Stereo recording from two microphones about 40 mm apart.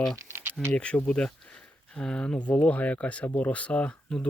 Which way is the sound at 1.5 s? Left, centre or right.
Left.